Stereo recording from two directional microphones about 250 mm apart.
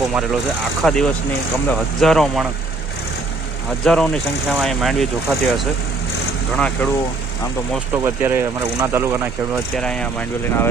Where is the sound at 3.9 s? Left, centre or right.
Centre.